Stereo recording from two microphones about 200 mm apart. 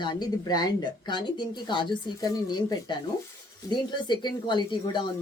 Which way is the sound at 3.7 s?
20° left (ahead or behind).